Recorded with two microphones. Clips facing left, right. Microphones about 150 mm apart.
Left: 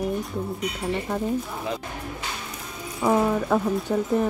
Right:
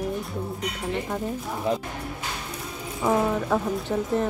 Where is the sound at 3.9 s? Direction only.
5° left (ahead or behind).